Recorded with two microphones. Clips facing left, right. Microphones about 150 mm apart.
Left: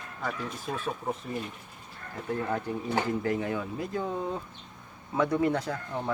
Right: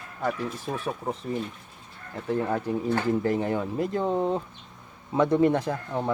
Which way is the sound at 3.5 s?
55° right (ahead or behind).